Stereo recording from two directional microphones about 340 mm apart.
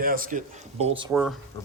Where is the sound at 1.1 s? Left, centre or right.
Centre.